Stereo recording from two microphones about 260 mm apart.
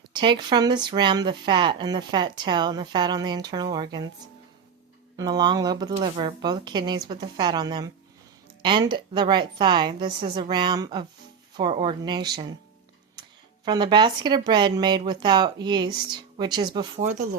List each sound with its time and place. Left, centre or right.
0.1 s speech: centre
5.1 s speech: centre
13.7 s speech: centre